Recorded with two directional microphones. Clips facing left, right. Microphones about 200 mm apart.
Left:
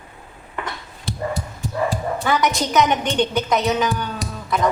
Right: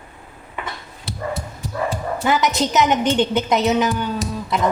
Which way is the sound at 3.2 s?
20° right (ahead or behind).